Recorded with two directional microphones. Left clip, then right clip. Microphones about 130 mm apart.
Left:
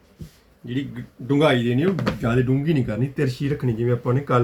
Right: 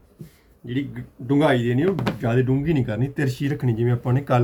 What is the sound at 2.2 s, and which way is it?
Speech, 20° left (ahead or behind).